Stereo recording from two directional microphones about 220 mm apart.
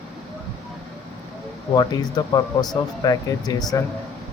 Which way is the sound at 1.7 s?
20° left (ahead or behind).